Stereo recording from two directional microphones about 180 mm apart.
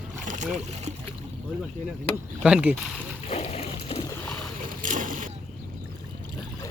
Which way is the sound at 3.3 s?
35° left (ahead or behind).